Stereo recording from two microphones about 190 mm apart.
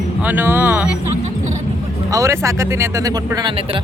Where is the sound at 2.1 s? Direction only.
15° right (ahead or behind).